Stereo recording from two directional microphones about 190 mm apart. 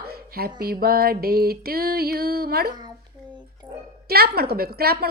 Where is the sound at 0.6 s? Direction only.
50° right (ahead or behind).